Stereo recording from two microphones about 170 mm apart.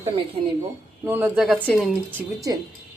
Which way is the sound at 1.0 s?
10° right (ahead or behind).